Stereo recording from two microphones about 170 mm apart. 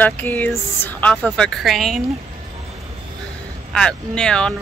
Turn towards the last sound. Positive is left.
turn(degrees=5)  # may be behind; listen again after turning